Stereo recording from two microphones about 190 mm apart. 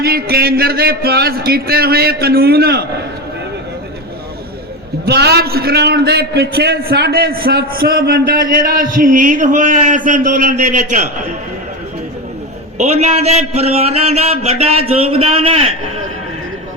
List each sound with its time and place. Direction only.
0.0 s a man's voice: 55° right (ahead or behind)
5.0 s a man's voice: 60° right (ahead or behind); by 11.0 s 40° right (ahead or behind)
12.7 s a man's voice: 35° right (ahead or behind)